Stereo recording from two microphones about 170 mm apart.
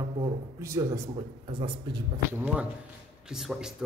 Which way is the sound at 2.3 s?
10° right (ahead or behind).